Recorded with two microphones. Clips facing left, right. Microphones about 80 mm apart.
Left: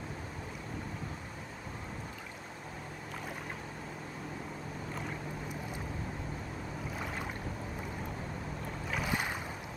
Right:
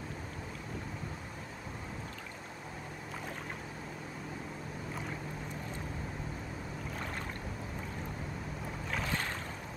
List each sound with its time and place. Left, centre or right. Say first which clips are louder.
8.9 s boat: left 2 dB; centre